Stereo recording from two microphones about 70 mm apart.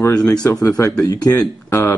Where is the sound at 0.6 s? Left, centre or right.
Left.